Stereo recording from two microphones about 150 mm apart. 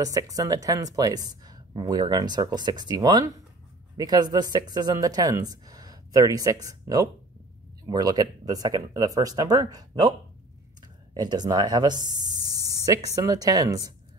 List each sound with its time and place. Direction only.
0.0 s speech: 25° right (ahead or behind)
11.1 s speech: 25° right (ahead or behind)